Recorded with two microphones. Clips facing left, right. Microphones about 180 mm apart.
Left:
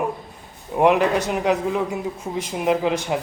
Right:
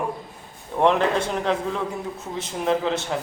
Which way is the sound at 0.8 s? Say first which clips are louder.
Left 2 dB; 10° left (ahead or behind).